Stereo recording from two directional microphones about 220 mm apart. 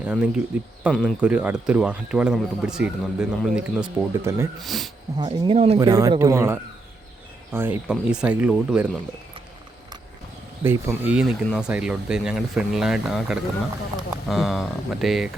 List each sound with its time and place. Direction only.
0.0 s speech: 5° right (ahead or behind)
4.6 s speech: centre (ahead or behind)
5.1 s speech: 20° right (ahead or behind)
5.8 s speech: 15° right (ahead or behind)
10.6 s speech: 10° right (ahead or behind)